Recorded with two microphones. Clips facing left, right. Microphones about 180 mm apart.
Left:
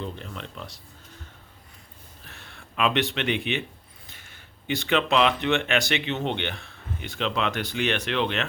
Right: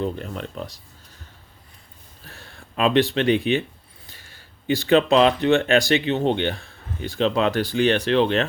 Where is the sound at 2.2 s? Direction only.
35° right (ahead or behind).